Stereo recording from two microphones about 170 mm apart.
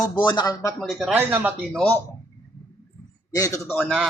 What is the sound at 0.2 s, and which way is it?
Speech, 25° left (ahead or behind).